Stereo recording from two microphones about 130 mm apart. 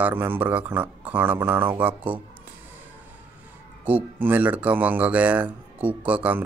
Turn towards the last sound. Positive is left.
turn(degrees=-10)  # may be behind; listen again after turning